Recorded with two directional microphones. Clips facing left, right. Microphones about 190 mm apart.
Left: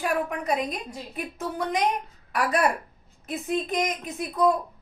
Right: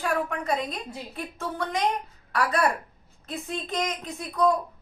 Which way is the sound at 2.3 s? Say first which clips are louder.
Left 1 dB; 20° left (ahead or behind).